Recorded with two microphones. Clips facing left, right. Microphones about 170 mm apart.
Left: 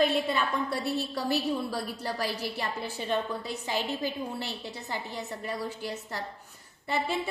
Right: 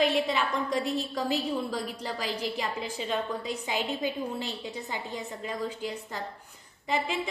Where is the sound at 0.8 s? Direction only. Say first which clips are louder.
Even; 15° right (ahead or behind).